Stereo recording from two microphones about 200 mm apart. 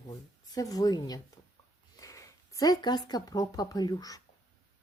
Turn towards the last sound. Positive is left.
turn(degrees=20)  # may be behind; listen again after turning